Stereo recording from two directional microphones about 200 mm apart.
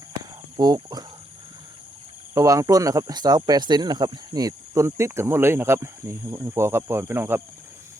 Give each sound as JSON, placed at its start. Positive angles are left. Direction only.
{"t": 0.5, "sound": "speech", "side_deg": -20}
{"t": 2.3, "sound": "speech", "side_deg": -15}